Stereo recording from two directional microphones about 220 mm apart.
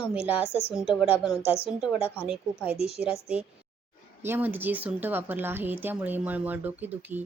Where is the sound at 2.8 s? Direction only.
25° left (ahead or behind).